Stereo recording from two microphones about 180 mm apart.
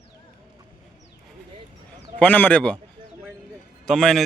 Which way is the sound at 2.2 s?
10° left (ahead or behind).